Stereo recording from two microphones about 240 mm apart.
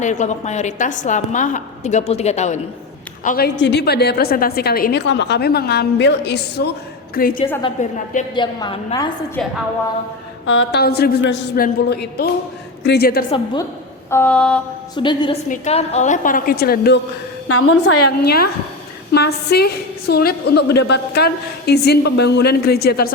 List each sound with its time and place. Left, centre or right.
0.0 s a woman's voice: left
3.2 s a woman's voice: left
8.4 s a woman's voice: centre
10.4 s a woman's voice: left
13.3 s a woman's voice: centre
14.1 s a sound: centre
14.9 s a woman's voice: centre; by 17.0 s left
17.5 s a woman's voice: left
19.1 s a woman's voice: left